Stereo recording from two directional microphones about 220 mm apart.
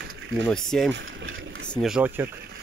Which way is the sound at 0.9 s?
55° right (ahead or behind).